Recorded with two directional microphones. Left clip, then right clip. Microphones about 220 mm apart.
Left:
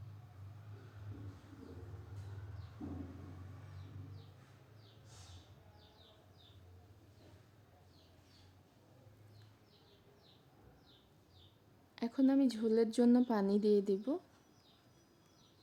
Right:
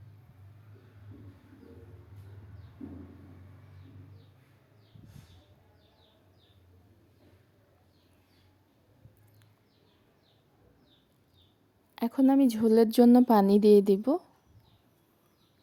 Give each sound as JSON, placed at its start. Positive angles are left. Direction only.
{"t": 11.9, "sound": "a woman's voice", "side_deg": -30}